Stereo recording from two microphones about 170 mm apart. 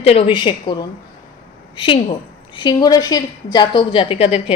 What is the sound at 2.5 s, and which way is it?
A woman's voice, 25° left (ahead or behind).